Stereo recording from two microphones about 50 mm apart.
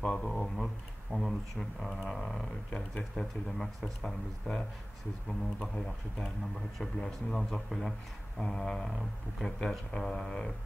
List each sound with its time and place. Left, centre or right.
0.0 s speech: centre
0.3 s speech: centre
6.2 s speech: centre